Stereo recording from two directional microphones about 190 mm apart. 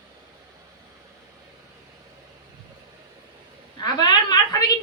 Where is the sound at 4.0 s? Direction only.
20° left (ahead or behind).